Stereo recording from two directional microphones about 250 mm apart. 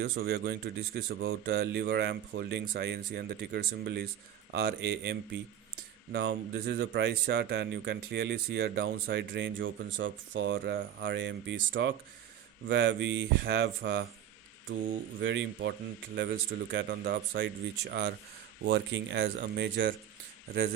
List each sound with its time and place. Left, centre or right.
0.0 s speech: right
15.2 s speech: right
16.7 s speech: right